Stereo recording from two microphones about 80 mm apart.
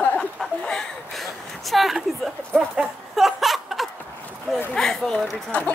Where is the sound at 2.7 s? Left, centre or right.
Centre.